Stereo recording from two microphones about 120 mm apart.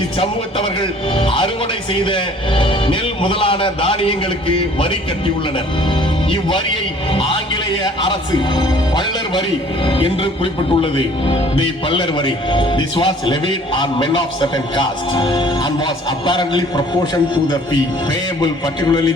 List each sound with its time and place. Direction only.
0.2 s speech: 45° left (ahead or behind)
7.1 s speech: 45° left (ahead or behind)
18.3 s speech: 35° left (ahead or behind)